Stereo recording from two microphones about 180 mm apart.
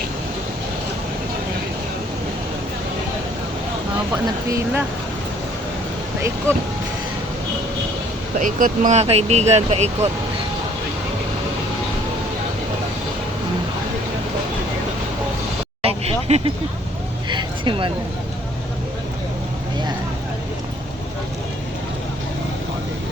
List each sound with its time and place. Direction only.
4.1 s speech: 15° right (ahead or behind)
8.4 s speech: 50° right (ahead or behind)
15.8 s vehicle: 35° right (ahead or behind)
17.2 s a sound: 25° right (ahead or behind)